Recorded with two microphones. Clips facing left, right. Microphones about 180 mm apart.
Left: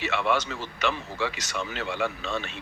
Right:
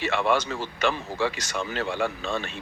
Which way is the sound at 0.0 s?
45° right (ahead or behind).